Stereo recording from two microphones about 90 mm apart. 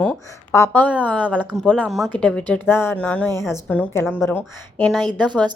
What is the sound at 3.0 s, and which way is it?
A woman's voice, 15° left (ahead or behind).